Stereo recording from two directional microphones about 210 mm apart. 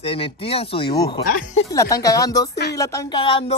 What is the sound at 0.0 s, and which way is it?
Speech, 25° left (ahead or behind).